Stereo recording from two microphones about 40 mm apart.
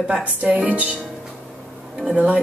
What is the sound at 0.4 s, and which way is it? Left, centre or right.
Speech, right.